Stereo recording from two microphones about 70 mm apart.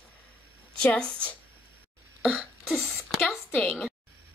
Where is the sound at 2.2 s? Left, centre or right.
Centre.